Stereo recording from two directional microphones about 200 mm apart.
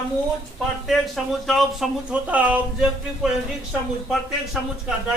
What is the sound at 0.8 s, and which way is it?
Speech, centre (ahead or behind).